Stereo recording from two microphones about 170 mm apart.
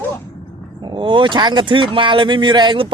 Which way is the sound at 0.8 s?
25° right (ahead or behind).